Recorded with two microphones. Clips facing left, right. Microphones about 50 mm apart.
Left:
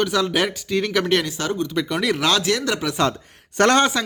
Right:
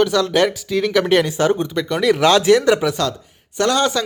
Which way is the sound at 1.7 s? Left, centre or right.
Centre.